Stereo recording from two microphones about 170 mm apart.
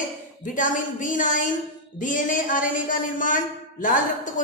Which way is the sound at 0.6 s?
50° left (ahead or behind).